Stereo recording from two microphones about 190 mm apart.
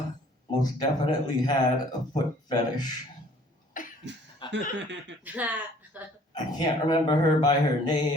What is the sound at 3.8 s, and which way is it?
Cough, 45° left (ahead or behind).